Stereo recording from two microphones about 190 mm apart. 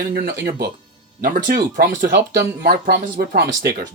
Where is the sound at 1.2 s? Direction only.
45° right (ahead or behind).